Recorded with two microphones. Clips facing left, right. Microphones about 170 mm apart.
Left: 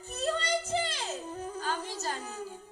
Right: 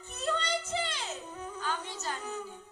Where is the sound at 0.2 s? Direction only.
40° left (ahead or behind).